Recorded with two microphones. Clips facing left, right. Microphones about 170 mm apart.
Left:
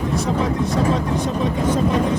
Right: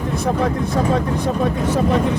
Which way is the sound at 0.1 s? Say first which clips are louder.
Right 3 dB; 55° right (ahead or behind).